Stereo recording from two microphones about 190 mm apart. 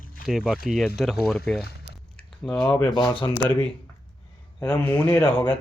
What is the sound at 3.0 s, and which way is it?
Speech, 25° left (ahead or behind).